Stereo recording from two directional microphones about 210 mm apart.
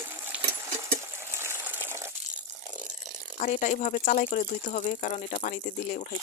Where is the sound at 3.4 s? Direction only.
35° left (ahead or behind).